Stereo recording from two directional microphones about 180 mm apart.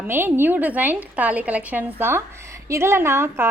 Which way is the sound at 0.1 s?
10° right (ahead or behind).